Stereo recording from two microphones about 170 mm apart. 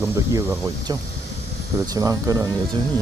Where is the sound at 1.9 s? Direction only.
20° right (ahead or behind).